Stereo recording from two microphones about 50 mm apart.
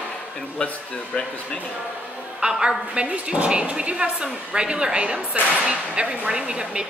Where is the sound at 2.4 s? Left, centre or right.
Right.